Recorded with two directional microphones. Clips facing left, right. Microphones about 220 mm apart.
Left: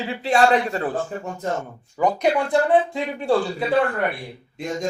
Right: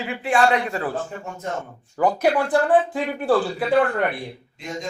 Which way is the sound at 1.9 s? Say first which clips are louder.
Right 1 dB; 5° right (ahead or behind).